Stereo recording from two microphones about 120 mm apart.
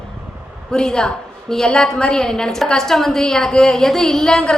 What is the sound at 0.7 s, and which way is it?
A woman's voice, 5° left (ahead or behind).